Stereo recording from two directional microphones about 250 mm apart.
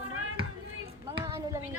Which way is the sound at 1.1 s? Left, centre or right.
Centre.